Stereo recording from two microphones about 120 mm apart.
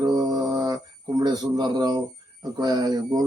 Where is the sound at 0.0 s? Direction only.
35° right (ahead or behind).